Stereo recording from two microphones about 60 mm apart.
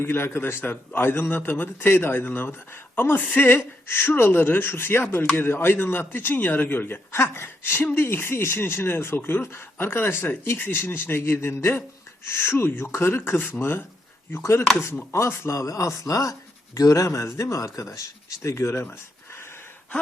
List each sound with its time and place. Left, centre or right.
0.0 s speech: left
15.5 s speech: left